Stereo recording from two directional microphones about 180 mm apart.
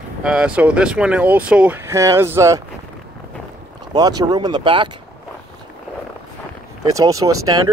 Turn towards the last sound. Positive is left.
turn(degrees=-20)  # may be behind; listen again after turning